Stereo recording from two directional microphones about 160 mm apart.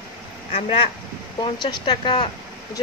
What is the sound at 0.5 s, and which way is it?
Speech, 35° left (ahead or behind).